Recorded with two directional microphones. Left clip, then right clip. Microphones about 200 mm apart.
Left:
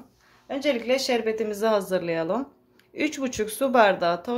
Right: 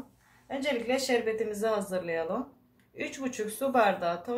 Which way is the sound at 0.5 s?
50° left (ahead or behind).